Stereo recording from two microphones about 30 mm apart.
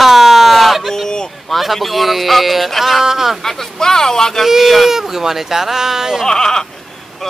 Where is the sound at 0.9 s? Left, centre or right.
Left.